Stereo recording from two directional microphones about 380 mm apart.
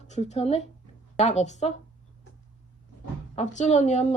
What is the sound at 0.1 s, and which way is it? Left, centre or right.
A woman's voice, centre.